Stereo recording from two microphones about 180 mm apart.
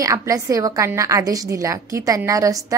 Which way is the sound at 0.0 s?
20° right (ahead or behind).